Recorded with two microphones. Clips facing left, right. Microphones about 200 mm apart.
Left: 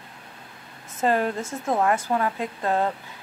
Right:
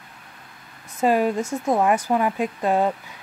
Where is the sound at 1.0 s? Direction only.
10° right (ahead or behind).